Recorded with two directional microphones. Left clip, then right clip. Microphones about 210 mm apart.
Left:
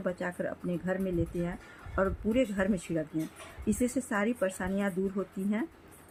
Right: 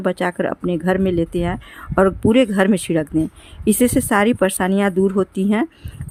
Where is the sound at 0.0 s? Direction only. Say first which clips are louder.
Right 14 dB; 45° right (ahead or behind).